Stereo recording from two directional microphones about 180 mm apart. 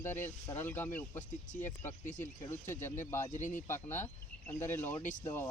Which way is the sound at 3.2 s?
45° left (ahead or behind).